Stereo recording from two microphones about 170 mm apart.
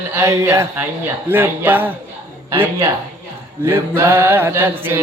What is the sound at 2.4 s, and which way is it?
Speech, 15° right (ahead or behind).